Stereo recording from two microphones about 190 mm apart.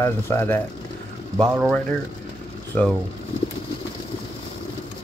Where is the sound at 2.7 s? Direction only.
5° left (ahead or behind).